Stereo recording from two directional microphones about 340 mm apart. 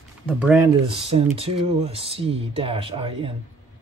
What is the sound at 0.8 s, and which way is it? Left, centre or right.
Speech, centre.